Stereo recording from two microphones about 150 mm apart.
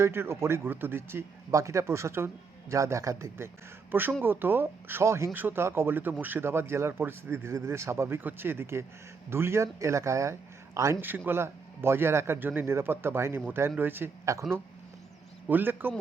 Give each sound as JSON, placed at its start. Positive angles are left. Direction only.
{"t": 0.0, "sound": "speech", "side_deg": -15}
{"t": 15.4, "sound": "speech", "side_deg": -15}